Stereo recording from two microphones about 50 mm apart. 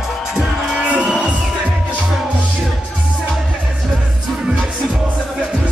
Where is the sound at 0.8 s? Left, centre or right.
Right.